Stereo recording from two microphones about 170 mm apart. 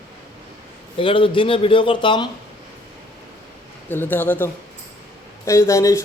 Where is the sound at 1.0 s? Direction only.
30° left (ahead or behind).